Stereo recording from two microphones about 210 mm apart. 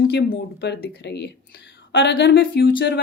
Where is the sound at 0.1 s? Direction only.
55° left (ahead or behind).